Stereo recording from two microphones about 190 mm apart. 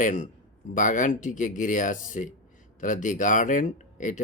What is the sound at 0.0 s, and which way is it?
Speech, 45° left (ahead or behind).